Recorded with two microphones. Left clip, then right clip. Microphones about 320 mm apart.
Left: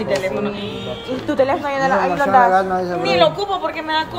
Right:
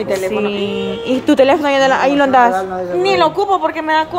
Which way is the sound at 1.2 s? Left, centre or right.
Right.